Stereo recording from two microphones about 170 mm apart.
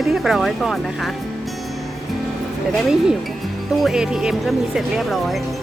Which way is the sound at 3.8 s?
5° right (ahead or behind).